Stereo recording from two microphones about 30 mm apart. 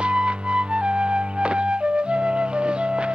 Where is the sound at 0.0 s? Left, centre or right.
Right.